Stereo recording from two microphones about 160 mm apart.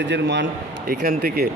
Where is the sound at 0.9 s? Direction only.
65° right (ahead or behind).